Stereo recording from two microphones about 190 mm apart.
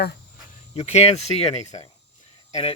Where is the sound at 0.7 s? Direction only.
35° left (ahead or behind).